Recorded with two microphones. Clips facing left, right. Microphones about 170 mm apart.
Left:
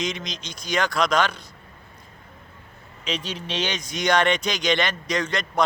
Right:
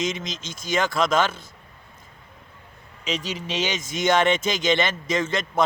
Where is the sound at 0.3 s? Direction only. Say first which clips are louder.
Right 1 dB; 50° right (ahead or behind).